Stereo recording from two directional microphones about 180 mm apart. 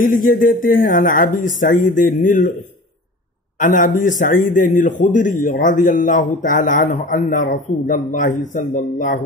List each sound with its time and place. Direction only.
0.0 s a man's voice: 50° left (ahead or behind)
3.5 s a man's voice: 45° left (ahead or behind)